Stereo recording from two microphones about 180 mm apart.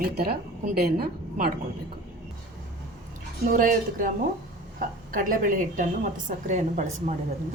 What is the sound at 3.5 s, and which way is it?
A woman's voice, 50° right (ahead or behind).